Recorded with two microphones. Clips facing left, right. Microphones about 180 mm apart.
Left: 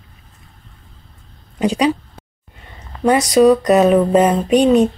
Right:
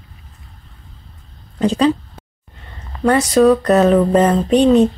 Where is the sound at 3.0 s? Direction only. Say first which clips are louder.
Even; 15° left (ahead or behind).